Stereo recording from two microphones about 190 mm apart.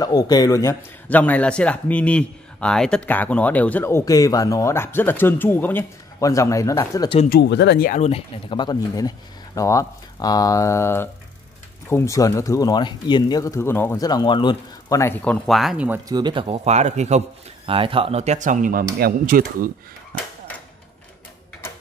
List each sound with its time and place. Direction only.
0.0 s a man's voice: 20° left (ahead or behind)
7.2 s speech: 60° left (ahead or behind)
7.9 s a man's voice: 35° left (ahead or behind); by 16.0 s 5° right (ahead or behind)
16.1 s speech: 25° right (ahead or behind); by 19.7 s 50° right (ahead or behind)